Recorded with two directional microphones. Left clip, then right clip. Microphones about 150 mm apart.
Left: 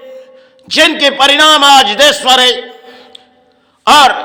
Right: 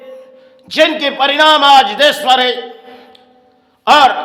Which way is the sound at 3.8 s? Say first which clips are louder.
Left 2 dB; 20° left (ahead or behind).